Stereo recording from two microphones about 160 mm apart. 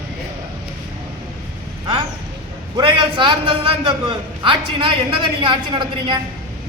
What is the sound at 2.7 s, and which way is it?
A man's voice, 30° right (ahead or behind).